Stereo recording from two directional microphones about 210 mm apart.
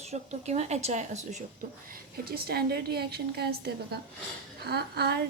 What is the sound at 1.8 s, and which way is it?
A woman's voice, 45° right (ahead or behind).